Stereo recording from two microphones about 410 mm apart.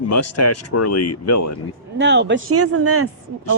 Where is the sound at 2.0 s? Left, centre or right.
Right.